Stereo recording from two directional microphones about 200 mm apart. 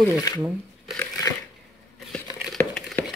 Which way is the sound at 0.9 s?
15° left (ahead or behind).